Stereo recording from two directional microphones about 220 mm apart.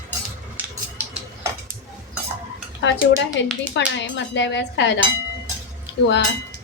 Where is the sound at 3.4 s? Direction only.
55° left (ahead or behind).